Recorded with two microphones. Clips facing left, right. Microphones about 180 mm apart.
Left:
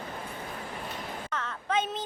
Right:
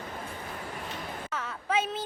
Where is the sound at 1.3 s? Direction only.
10° right (ahead or behind).